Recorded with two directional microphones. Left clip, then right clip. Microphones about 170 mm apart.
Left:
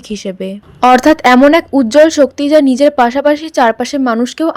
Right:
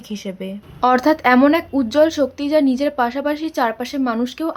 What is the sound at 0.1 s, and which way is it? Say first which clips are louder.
A woman's voice: left 8 dB; 35° left (ahead or behind).